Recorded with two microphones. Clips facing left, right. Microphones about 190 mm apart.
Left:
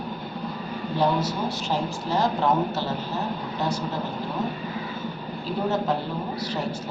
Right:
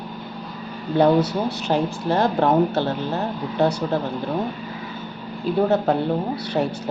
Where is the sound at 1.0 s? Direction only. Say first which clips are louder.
Right 7 dB; 60° right (ahead or behind).